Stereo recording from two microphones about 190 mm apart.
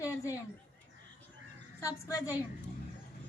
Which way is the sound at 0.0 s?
15° left (ahead or behind).